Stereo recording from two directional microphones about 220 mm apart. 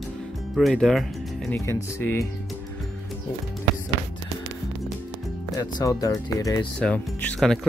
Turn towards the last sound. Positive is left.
turn(degrees=5)  # may be behind; listen again after turning